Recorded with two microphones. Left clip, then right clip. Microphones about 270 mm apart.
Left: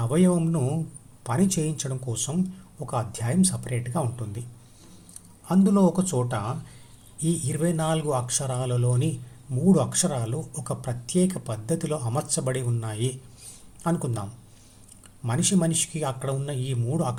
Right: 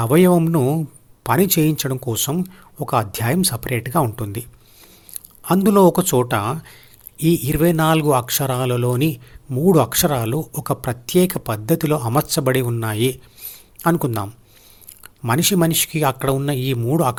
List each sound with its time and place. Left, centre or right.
0.0 s speech: right
5.5 s speech: right